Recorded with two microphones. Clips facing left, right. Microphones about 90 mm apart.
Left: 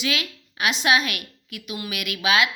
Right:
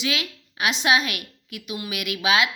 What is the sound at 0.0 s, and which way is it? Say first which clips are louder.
Speech: even; 20° right (ahead or behind).